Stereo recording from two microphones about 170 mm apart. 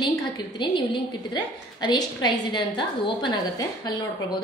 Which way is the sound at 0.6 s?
30° left (ahead or behind).